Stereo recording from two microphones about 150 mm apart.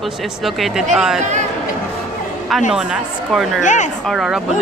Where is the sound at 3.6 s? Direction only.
55° left (ahead or behind).